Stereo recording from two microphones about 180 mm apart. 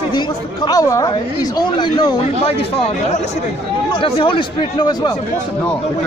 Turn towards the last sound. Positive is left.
turn(degrees=25)  # may be behind; listen again after turning